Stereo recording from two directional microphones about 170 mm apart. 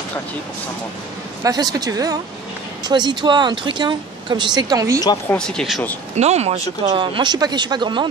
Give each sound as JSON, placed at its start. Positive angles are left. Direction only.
{"t": 1.4, "sound": "speech", "side_deg": -20}
{"t": 5.3, "sound": "speech", "side_deg": 5}
{"t": 6.1, "sound": "speech", "side_deg": -40}